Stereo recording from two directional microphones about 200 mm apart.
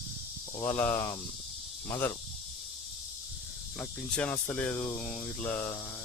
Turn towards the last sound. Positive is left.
turn(degrees=10)  # may be behind; listen again after turning